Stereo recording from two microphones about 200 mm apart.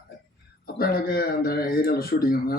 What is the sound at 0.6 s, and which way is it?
Speech, 50° left (ahead or behind).